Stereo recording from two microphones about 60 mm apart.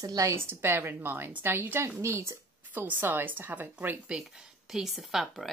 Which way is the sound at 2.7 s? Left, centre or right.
Right.